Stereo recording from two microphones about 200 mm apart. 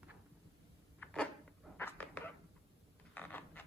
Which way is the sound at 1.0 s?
5° left (ahead or behind).